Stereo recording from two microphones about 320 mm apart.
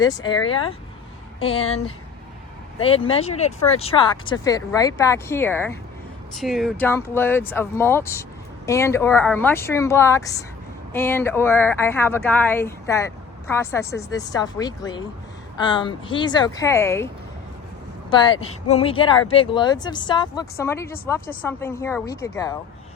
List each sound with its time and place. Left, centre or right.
0.0 s speech: centre
18.1 s speech: centre